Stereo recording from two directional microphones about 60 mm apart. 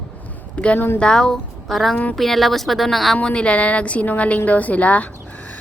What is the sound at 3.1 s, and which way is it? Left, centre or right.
A woman's voice, centre.